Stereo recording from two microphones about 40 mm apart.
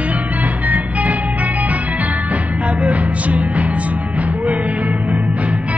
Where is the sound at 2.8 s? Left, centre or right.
Right.